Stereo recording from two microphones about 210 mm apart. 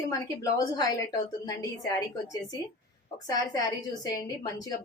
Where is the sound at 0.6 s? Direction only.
15° left (ahead or behind).